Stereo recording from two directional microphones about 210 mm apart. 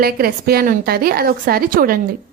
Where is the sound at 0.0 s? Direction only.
45° right (ahead or behind).